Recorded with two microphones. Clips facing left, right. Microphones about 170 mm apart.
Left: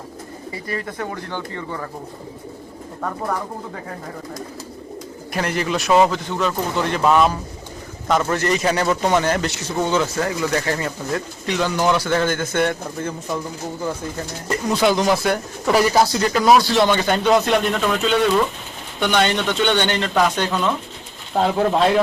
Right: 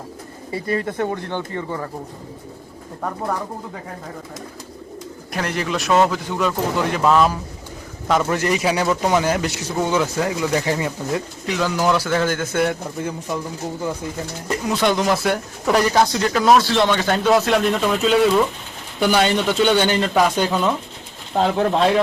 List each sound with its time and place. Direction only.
0.5 s speech: 30° right (ahead or behind)
5.3 s speech: centre (ahead or behind)
6.1 s speech: 10° right (ahead or behind)
11.4 s speech: 5° right (ahead or behind)
14.4 s speech: centre (ahead or behind)